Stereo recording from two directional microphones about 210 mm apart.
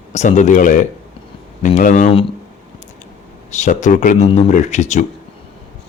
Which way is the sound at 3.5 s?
35° left (ahead or behind).